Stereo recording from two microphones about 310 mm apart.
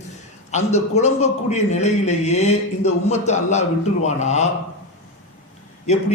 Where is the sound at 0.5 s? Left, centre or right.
Left.